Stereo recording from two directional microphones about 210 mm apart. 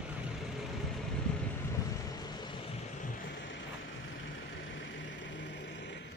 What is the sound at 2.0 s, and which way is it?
Vehicle, 20° left (ahead or behind).